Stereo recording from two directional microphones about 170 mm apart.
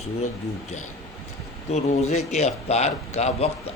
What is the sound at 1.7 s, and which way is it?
Speech, 40° left (ahead or behind).